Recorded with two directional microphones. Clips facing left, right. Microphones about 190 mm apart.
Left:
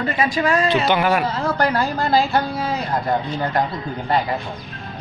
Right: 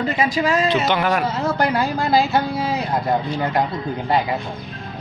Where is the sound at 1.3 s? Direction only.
10° right (ahead or behind).